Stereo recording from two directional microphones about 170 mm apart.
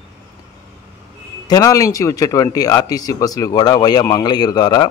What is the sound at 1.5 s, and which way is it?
A man's voice, 20° left (ahead or behind).